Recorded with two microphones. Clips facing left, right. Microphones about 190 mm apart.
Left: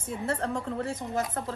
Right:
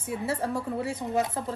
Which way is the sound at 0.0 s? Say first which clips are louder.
Right 1 dB; 10° right (ahead or behind).